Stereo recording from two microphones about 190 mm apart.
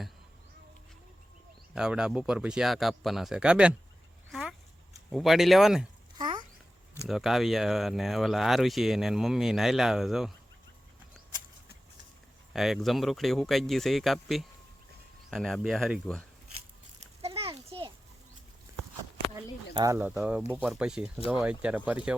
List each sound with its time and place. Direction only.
1.7 s speech: 5° right (ahead or behind)
4.3 s a sound: centre (ahead or behind)
5.1 s speech: centre (ahead or behind)
6.1 s a sound: 25° right (ahead or behind)
7.1 s speech: centre (ahead or behind)
12.5 s speech: centre (ahead or behind)
17.2 s children playing: 30° right (ahead or behind)
19.4 s speech: 20° right (ahead or behind)